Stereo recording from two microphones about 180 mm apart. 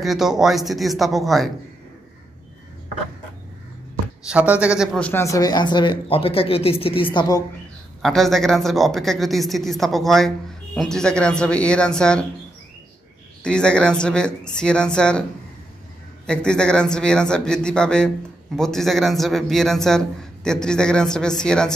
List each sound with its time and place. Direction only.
0.0 s speech: centre (ahead or behind)
4.3 s speech: 5° right (ahead or behind)
4.9 s speech: 10° left (ahead or behind)
8.0 s speech: centre (ahead or behind)
13.4 s speech: 5° left (ahead or behind)
16.3 s speech: 5° left (ahead or behind)